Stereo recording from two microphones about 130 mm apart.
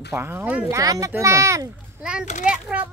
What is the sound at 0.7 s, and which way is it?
Speech, 25° right (ahead or behind).